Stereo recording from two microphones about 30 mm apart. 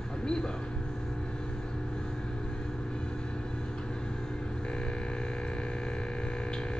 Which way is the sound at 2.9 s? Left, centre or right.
Left.